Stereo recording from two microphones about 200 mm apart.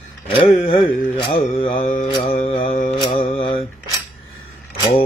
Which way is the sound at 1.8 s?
40° left (ahead or behind).